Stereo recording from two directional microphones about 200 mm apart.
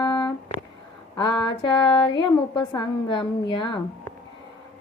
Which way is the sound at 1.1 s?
20° left (ahead or behind).